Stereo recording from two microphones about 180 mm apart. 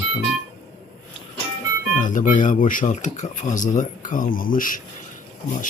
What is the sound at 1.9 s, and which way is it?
Speech, 45° left (ahead or behind).